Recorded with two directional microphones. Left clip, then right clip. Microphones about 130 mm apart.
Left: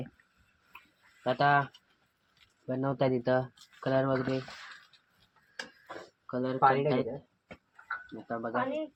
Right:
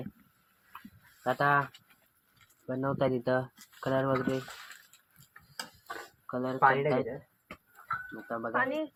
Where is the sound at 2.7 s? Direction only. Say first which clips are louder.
Even; 10° left (ahead or behind).